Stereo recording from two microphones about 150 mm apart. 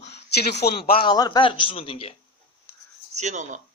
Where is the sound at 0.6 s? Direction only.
80° left.